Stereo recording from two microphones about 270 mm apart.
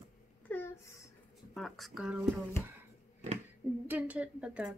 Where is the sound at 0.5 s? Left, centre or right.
Centre.